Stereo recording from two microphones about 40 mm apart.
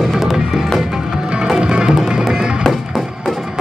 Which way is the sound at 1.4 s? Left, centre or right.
Right.